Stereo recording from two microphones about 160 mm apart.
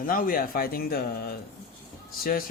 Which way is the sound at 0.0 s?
60° left (ahead or behind).